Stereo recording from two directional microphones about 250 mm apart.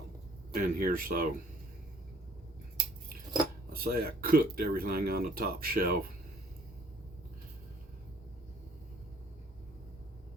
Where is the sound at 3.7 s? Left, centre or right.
Right.